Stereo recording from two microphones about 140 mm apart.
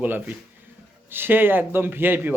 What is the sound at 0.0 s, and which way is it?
Speech, 10° right (ahead or behind).